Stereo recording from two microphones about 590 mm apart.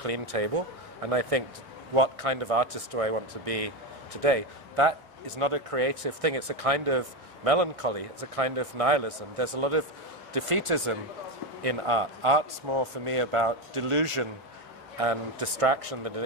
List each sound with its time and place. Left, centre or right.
0.0 s a man's voice: right
15.0 s speech: right